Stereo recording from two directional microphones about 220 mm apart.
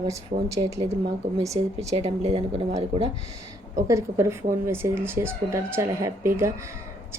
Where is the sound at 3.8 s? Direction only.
15° right (ahead or behind).